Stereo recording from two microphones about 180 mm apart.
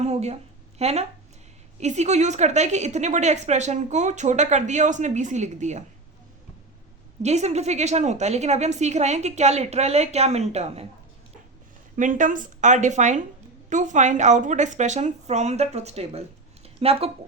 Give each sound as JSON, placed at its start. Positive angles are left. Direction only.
{"t": 0.0, "sound": "a sound", "side_deg": -35}
{"t": 0.8, "sound": "a woman's voice", "side_deg": -35}
{"t": 7.2, "sound": "a woman's voice", "side_deg": -40}
{"t": 11.9, "sound": "a woman's voice", "side_deg": -45}